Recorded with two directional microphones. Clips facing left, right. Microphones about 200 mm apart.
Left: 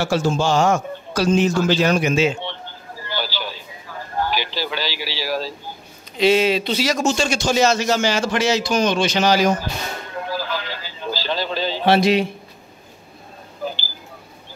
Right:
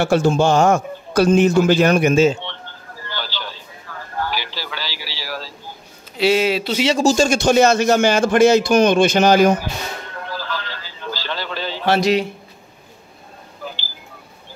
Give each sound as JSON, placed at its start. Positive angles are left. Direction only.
{"t": 0.0, "sound": "a man's voice", "side_deg": -60}
{"t": 3.0, "sound": "a sound", "side_deg": 10}
{"t": 6.1, "sound": "speech", "side_deg": -10}
{"t": 6.8, "sound": "a man's voice", "side_deg": -30}
{"t": 10.1, "sound": "a sound", "side_deg": 10}
{"t": 11.8, "sound": "speech", "side_deg": 25}